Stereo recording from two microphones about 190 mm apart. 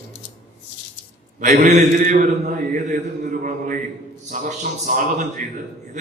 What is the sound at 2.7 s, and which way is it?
Mantra, 45° right (ahead or behind).